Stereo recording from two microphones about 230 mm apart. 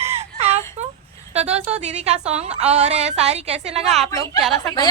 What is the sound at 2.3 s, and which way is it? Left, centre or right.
A woman's voice, right.